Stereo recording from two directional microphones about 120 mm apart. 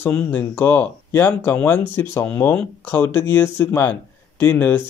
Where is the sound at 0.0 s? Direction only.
10° left (ahead or behind).